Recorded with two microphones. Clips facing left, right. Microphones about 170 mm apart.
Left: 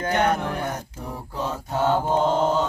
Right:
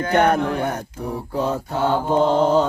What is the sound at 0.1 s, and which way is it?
Music, 55° right (ahead or behind).